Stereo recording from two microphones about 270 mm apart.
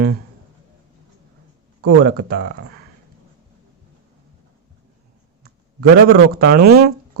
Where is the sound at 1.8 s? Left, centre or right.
Right.